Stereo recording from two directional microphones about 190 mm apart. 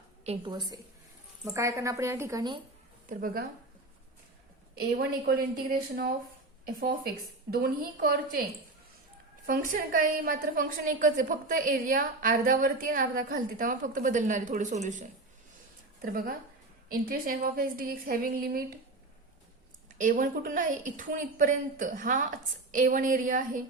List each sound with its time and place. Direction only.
0.3 s a woman's voice: 25° right (ahead or behind)
1.5 s a woman's voice: 15° right (ahead or behind)
3.1 s a woman's voice: 50° right (ahead or behind)
4.7 s a woman's voice: 55° right (ahead or behind)
9.5 s a woman's voice: 45° right (ahead or behind)
16.0 s a woman's voice: 50° right (ahead or behind)
20.0 s a woman's voice: 45° right (ahead or behind)